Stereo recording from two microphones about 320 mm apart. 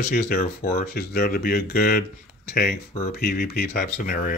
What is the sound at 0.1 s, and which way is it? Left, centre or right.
Speech, left.